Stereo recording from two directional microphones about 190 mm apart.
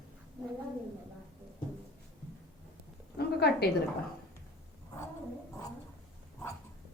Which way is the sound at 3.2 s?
55° left (ahead or behind).